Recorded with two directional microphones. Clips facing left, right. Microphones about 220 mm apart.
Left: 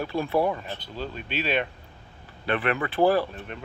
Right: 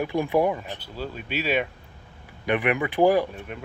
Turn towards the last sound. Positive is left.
turn(degrees=-10)  # may be behind; listen again after turning